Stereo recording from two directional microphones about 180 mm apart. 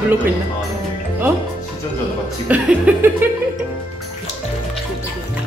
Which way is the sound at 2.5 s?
10° right (ahead or behind).